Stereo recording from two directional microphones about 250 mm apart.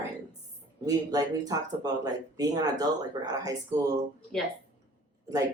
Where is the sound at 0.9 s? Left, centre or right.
Centre.